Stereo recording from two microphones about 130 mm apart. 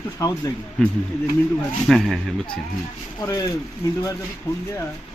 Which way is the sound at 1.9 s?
Centre (ahead or behind).